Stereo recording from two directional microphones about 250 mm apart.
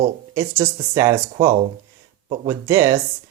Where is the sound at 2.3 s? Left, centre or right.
Centre.